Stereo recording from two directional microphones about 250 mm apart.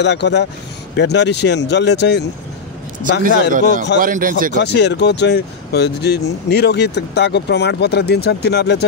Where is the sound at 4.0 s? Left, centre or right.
Right.